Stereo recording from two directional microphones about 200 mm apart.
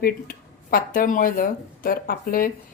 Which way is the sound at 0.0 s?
45° left (ahead or behind).